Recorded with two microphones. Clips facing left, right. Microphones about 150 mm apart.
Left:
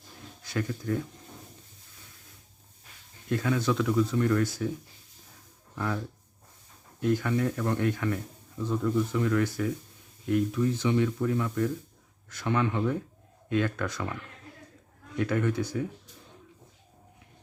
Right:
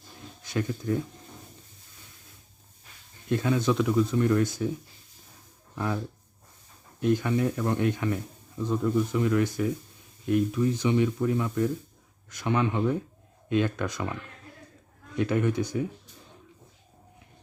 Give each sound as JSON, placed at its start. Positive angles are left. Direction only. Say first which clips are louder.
{"t": 0.4, "sound": "speech", "louder": "right 2 dB", "side_deg": -20}
{"t": 3.2, "sound": "speech", "louder": "right 2 dB", "side_deg": -25}
{"t": 5.7, "sound": "speech", "louder": "right 2 dB", "side_deg": -20}
{"t": 7.0, "sound": "speech", "louder": "right 2 dB", "side_deg": -20}